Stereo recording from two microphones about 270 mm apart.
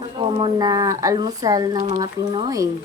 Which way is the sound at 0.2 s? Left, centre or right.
Centre.